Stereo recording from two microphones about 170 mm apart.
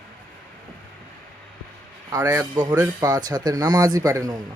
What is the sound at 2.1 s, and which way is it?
Speech, 15° right (ahead or behind).